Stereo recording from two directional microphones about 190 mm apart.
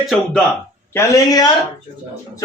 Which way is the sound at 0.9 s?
15° left (ahead or behind).